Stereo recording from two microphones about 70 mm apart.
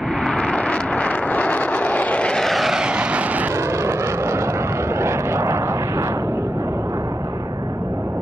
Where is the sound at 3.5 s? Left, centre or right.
Right.